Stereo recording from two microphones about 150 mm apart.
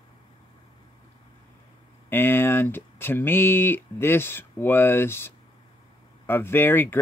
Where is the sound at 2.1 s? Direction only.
15° left (ahead or behind).